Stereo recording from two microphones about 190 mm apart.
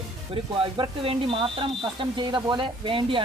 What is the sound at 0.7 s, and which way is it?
Speech, 30° right (ahead or behind).